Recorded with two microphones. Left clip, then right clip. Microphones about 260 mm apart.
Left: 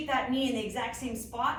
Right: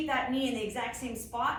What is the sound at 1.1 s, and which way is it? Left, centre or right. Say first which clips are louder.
Speech: left 2 dB; right.